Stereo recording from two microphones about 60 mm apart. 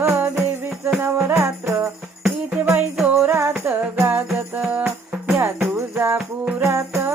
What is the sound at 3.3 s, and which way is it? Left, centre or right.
Music, right.